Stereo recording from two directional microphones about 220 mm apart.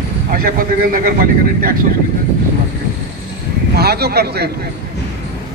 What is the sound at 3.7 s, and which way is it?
Speech, 45° right (ahead or behind).